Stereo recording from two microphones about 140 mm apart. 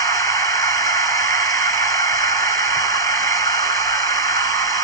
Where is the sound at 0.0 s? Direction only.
25° left (ahead or behind).